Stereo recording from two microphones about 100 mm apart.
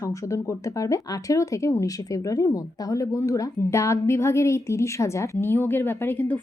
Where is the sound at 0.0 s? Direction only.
30° left (ahead or behind).